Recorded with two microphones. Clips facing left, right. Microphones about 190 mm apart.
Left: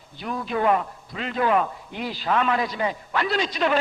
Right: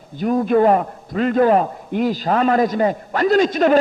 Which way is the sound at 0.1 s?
45° right (ahead or behind).